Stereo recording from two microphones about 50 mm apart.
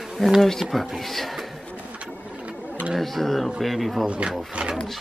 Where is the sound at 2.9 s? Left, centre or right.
Centre.